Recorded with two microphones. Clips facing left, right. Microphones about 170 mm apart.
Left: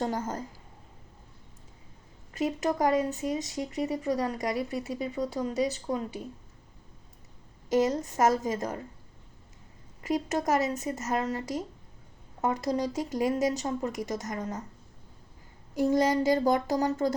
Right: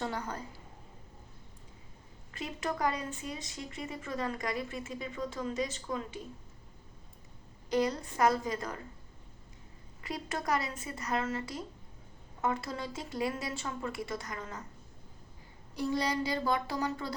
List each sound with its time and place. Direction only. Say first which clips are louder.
0.0 s speech: left 6 dB; 45° left (ahead or behind)
2.3 s speech: left 8 dB; 40° left (ahead or behind)
7.9 s speech: left 4 dB; 40° left (ahead or behind)
10.0 s speech: left 9 dB; 40° left (ahead or behind)
15.7 s speech: left 8 dB; 45° left (ahead or behind)